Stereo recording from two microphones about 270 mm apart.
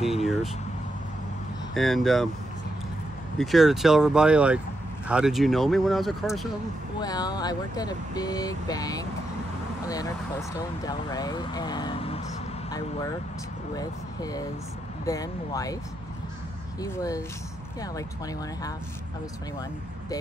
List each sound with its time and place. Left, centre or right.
0.0 s vehicle: centre
1.7 s speech: centre
3.3 s speech: centre
7.0 s speech: centre
13.7 s speech: centre
16.8 s speech: centre